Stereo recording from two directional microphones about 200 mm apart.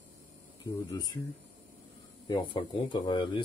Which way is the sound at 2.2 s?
25° left (ahead or behind).